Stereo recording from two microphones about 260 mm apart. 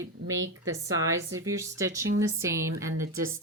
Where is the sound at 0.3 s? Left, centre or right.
Right.